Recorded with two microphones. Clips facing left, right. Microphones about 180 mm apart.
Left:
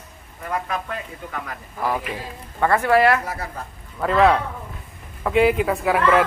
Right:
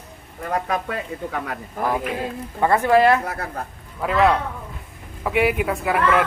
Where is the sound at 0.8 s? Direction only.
65° right (ahead or behind).